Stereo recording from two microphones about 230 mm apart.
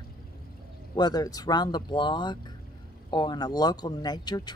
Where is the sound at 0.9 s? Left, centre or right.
Centre.